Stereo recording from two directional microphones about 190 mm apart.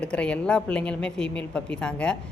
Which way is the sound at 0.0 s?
5° left (ahead or behind).